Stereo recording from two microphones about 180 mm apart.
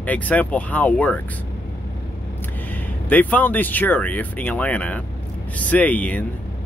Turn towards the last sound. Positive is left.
turn(degrees=10)  # may be behind; listen again after turning